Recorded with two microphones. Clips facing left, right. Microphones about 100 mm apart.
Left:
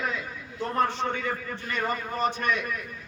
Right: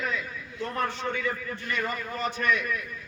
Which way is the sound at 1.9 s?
45° left (ahead or behind).